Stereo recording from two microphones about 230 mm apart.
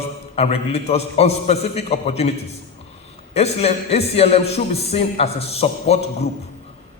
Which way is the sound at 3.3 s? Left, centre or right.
Left.